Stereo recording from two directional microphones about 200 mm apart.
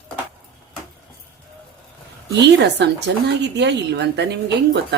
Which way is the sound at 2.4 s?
60° right (ahead or behind).